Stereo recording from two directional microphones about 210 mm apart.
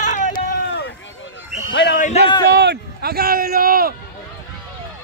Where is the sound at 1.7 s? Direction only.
60° left (ahead or behind).